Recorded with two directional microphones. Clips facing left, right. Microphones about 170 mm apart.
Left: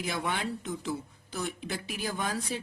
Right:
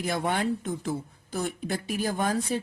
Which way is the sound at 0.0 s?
50° right (ahead or behind).